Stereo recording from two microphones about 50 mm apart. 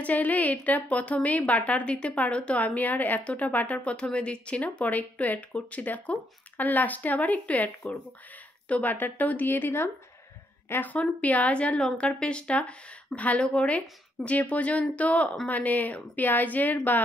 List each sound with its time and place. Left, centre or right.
0.0 s a woman's voice: left